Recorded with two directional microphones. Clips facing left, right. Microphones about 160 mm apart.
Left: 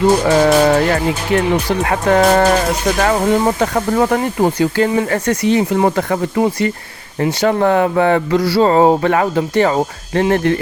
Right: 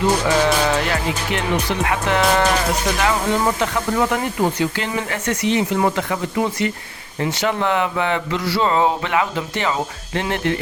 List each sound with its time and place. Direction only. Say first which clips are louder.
0.3 s speech: left 6 dB; 45° left (ahead or behind)